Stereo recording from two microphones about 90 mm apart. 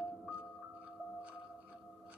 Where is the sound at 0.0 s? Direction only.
15° right (ahead or behind).